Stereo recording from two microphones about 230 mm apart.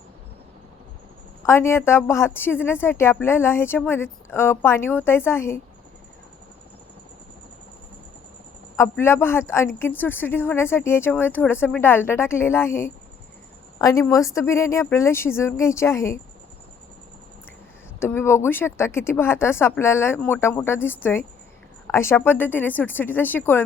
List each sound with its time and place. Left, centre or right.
1.5 s a woman's voice: centre
8.7 s a woman's voice: centre
18.0 s a woman's voice: centre